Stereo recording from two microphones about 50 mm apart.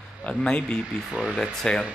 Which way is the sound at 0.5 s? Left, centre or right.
Centre.